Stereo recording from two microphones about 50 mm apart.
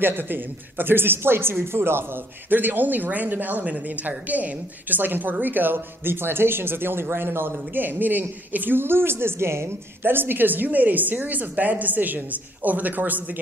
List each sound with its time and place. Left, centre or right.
0.0 s a woman's voice: right
10.0 s a woman's voice: right